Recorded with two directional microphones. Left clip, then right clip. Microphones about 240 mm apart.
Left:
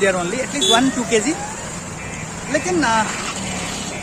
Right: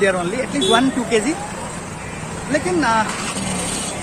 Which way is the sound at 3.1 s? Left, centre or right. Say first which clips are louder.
Right 1 dB; right.